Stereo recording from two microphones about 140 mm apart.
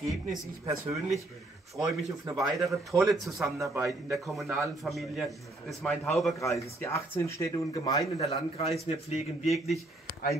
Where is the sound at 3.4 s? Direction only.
20° right (ahead or behind).